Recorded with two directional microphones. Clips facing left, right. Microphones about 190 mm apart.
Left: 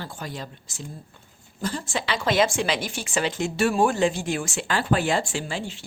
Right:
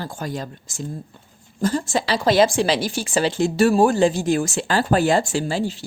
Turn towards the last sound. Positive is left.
turn(degrees=-35)  # may be behind; listen again after turning